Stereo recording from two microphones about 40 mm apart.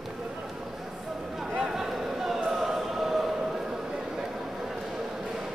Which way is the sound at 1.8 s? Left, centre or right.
Centre.